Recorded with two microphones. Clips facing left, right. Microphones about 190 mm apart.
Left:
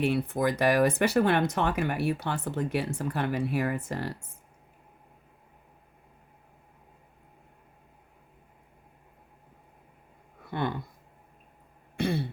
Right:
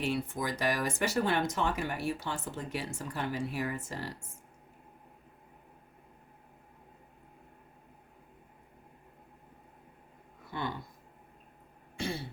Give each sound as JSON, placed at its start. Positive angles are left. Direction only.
{"t": 0.0, "sound": "speech", "side_deg": 60}
{"t": 10.5, "sound": "speech", "side_deg": 60}
{"t": 11.9, "sound": "throat clearing", "side_deg": 60}